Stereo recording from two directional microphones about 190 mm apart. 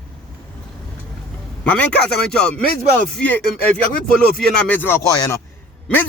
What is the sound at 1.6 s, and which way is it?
Speech, 5° left (ahead or behind).